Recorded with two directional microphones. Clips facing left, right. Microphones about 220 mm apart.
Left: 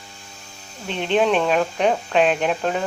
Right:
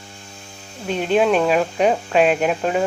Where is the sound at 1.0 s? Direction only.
5° right (ahead or behind).